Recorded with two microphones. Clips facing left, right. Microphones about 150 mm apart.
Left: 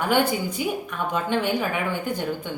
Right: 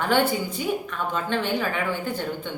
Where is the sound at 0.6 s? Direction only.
10° left (ahead or behind).